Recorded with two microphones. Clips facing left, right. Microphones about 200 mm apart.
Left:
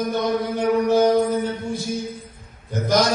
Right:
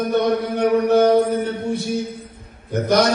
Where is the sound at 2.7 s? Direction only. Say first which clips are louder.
Right 3 dB; 65° right (ahead or behind).